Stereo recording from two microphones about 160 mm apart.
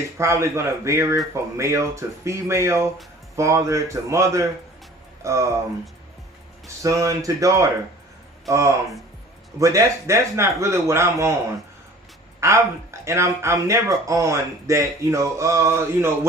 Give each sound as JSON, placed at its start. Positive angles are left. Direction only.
{"t": 0.2, "sound": "speech", "side_deg": -20}
{"t": 6.8, "sound": "speech", "side_deg": -20}
{"t": 12.4, "sound": "speech", "side_deg": -20}